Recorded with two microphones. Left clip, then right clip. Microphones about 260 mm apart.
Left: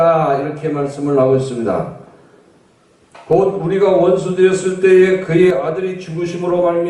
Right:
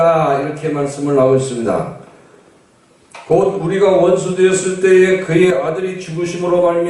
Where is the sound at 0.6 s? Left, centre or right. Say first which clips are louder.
Right 1 dB; centre.